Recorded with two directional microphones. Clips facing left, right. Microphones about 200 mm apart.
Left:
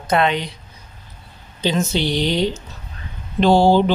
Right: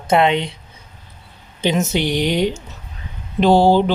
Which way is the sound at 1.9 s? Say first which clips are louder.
Right 1 dB; 15° right (ahead or behind).